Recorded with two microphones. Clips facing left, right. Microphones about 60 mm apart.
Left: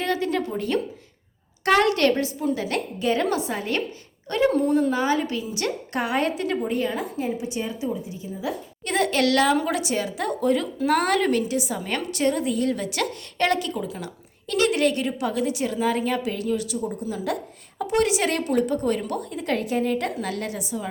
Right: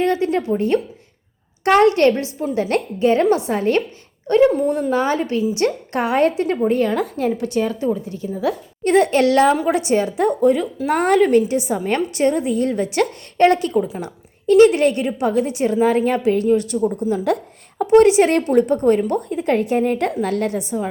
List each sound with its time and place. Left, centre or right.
0.0 s a woman's voice: right
2.6 s a woman's voice: right
4.3 s a woman's voice: right
4.9 s a woman's voice: right
7.0 s a woman's voice: right
8.8 s a woman's voice: right
17.7 s a woman's voice: right